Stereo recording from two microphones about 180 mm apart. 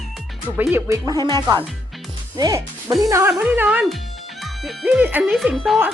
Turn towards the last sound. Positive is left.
turn(degrees=0)  # may be behind; listen again after turning